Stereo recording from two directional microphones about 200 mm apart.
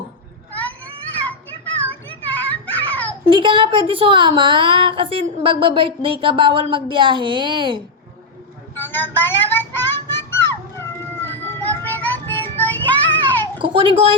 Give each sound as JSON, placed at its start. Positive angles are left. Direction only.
{"t": 2.2, "sound": "music", "side_deg": 10}
{"t": 3.2, "sound": "a woman's voice", "side_deg": -25}
{"t": 8.7, "sound": "music", "side_deg": 10}
{"t": 13.6, "sound": "a child's voice", "side_deg": -25}